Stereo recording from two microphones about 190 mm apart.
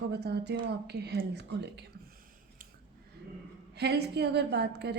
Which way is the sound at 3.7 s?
60° right (ahead or behind).